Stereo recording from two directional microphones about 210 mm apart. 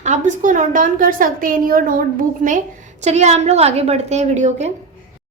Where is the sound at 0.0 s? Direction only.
35° right (ahead or behind).